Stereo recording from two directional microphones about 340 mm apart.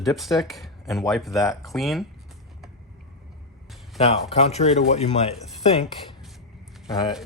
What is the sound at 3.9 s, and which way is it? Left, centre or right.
Speech, centre.